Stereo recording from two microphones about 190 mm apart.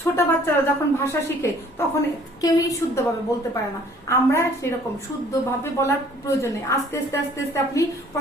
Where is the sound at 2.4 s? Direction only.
20° left (ahead or behind).